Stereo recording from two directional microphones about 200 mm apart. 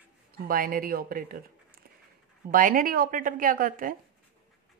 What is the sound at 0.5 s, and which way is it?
Speech, 45° right (ahead or behind).